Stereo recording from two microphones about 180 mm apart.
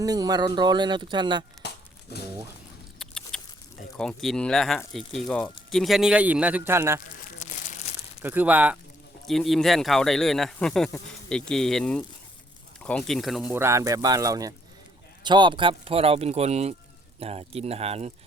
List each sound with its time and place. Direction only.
0.0 s speech: 20° right (ahead or behind)
3.0 s keys jangling: 5° left (ahead or behind)
3.9 s speech: centre (ahead or behind); by 7.0 s 15° right (ahead or behind)
8.2 s speech: 10° right (ahead or behind)
13.5 s speech: 15° right (ahead or behind); by 18.1 s 35° right (ahead or behind)